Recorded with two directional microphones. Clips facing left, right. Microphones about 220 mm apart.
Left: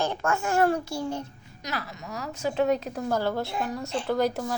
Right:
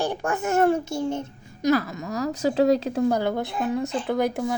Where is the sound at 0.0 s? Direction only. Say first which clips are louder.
Right 2 dB; 15° right (ahead or behind).